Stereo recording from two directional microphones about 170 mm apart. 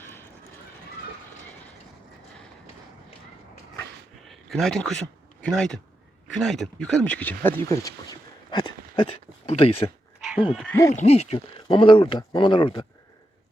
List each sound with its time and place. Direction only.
4.3 s speech: centre (ahead or behind); by 9.9 s 35° left (ahead or behind)
10.4 s speech: 5° right (ahead or behind)
10.7 s speech: 15° left (ahead or behind)
10.9 s speech: 40° left (ahead or behind)